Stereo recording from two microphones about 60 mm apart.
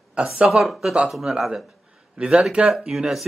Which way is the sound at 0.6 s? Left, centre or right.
Centre.